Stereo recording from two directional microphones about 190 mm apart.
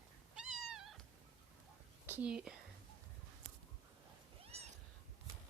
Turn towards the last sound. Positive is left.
turn(degrees=-35)  # may be behind; listen again after turning